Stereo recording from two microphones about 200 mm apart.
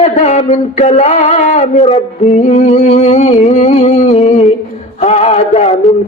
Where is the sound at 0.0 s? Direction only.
35° left (ahead or behind).